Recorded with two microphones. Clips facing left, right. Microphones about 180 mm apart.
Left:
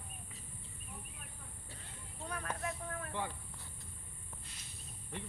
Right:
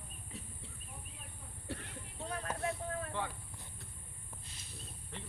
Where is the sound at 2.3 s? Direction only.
30° right (ahead or behind).